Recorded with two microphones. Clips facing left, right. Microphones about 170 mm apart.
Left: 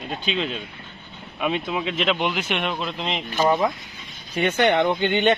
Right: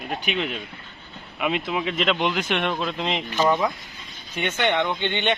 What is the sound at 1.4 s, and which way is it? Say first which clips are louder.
Speech: even; 20° left (ahead or behind).